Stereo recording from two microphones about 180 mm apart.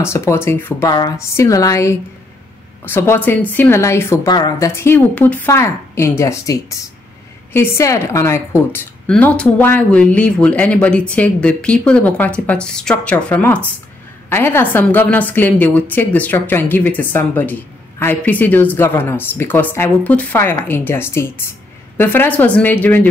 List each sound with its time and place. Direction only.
0.0 s a woman's voice: 15° left (ahead or behind)